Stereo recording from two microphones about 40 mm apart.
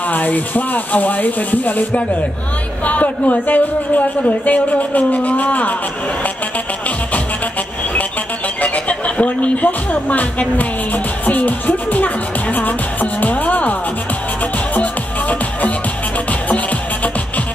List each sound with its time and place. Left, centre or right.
0.1 s speech: left
8.5 s speech: left
11.2 s speech: left
12.5 s music: left
14.8 s music: left